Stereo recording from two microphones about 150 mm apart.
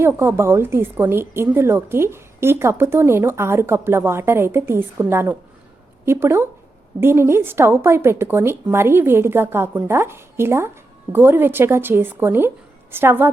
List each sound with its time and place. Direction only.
0.0 s a woman's voice: 15° right (ahead or behind)